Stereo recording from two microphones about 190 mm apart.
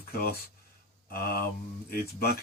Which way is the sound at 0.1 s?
55° left (ahead or behind).